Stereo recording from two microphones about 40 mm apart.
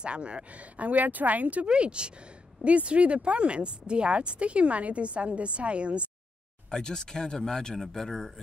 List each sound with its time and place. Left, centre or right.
0.0 s speech: right
1.7 s speech: right
6.7 s speech: centre